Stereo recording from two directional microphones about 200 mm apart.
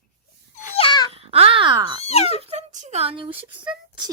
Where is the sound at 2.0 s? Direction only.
30° left (ahead or behind).